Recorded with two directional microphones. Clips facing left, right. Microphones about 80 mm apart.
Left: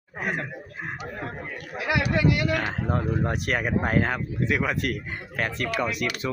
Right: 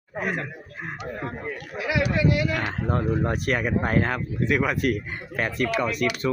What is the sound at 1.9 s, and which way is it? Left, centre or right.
Speech, left.